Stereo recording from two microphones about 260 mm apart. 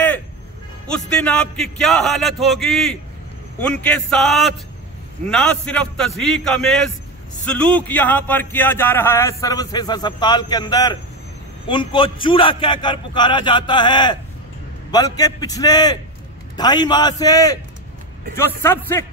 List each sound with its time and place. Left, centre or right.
0.8 s a man's voice: centre